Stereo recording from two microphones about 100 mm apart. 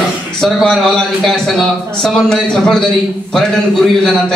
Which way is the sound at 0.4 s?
5° left (ahead or behind).